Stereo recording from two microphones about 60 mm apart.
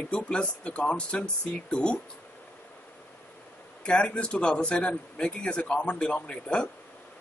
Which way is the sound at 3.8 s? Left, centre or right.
Centre.